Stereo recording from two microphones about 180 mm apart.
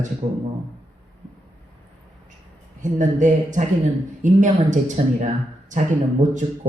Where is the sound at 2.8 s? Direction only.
45° right (ahead or behind).